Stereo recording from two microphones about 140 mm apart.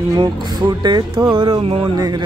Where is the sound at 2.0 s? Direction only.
30° right (ahead or behind).